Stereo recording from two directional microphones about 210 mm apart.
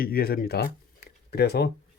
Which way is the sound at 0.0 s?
45° left (ahead or behind).